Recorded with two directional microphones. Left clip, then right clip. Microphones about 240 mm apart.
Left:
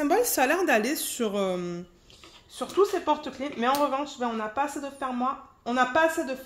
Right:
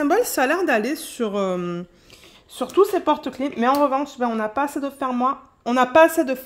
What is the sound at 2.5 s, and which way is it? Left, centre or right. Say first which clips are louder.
Speech: right 6 dB; right.